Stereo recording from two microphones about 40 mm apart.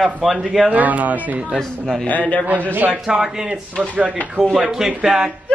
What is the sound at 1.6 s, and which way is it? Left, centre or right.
Speech, centre.